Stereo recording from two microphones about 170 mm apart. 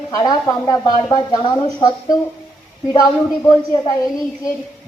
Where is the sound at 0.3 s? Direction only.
20° left (ahead or behind).